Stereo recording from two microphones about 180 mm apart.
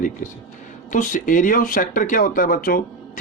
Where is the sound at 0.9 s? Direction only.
45° left (ahead or behind).